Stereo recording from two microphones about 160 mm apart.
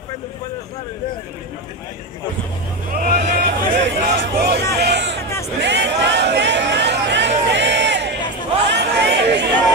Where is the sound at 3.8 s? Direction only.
85° right.